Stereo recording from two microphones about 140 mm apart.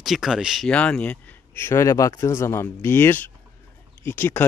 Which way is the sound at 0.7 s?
10° left (ahead or behind).